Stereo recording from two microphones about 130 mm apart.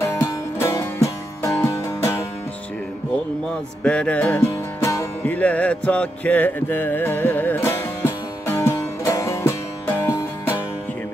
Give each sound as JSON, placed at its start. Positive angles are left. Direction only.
{"t": 0.0, "sound": "music", "side_deg": 20}
{"t": 3.8, "sound": "music", "side_deg": 10}
{"t": 4.4, "sound": "music", "side_deg": 20}